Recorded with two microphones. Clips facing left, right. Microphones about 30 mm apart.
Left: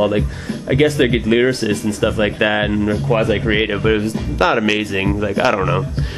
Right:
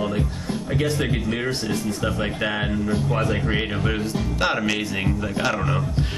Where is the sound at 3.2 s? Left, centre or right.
Left.